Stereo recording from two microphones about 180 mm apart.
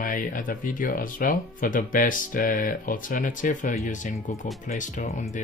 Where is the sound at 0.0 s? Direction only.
50° left (ahead or behind).